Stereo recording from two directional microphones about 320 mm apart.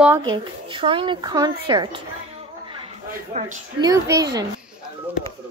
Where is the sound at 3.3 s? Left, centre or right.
Right.